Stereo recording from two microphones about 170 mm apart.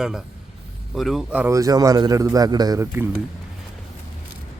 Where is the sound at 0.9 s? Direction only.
Centre (ahead or behind).